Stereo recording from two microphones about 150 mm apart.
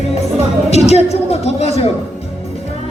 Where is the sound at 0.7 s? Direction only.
45° left (ahead or behind).